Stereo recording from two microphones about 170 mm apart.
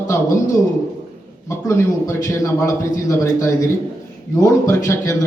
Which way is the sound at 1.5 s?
15° left (ahead or behind).